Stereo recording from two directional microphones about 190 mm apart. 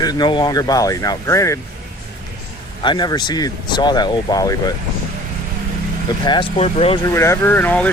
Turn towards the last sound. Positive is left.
turn(degrees=10)  # may be behind; listen again after turning